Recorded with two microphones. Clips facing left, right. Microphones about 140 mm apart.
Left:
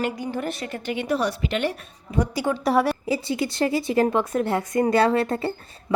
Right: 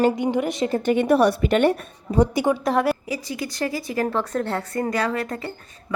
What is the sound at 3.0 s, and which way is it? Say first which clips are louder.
Speech: left 4 dB; 30° left (ahead or behind).